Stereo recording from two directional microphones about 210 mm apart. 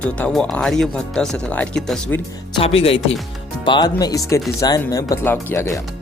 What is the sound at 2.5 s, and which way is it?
Speech, 25° left (ahead or behind).